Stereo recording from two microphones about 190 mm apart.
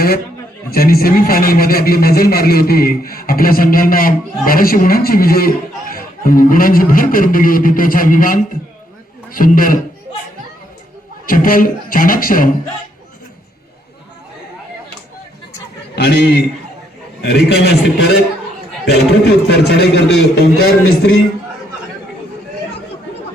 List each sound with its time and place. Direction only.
0.7 s speech: 50° left (ahead or behind)
11.3 s speech: 45° left (ahead or behind)
16.0 s speech: 60° left (ahead or behind)